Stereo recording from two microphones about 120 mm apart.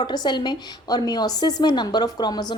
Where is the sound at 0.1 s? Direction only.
35° left (ahead or behind).